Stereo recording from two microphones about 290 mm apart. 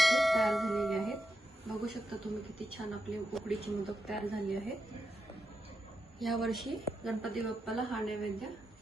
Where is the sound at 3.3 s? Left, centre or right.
Centre.